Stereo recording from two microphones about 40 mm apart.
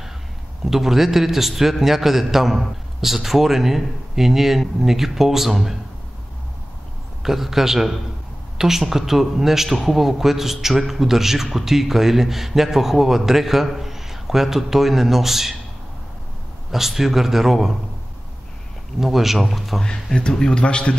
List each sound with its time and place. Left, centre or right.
0.7 s a man's voice: centre
7.2 s a man's voice: centre
16.7 s a man's voice: centre
18.9 s a man's voice: centre
20.3 s a man's voice: left